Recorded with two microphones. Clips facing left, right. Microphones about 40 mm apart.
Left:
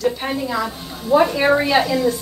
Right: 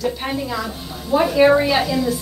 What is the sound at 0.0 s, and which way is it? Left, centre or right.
A woman's voice, centre.